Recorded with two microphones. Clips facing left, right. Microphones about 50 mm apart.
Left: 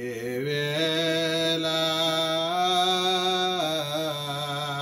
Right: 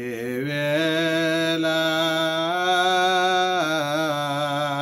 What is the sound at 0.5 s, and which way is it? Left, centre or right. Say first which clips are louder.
Mantra: right 6 dB; right.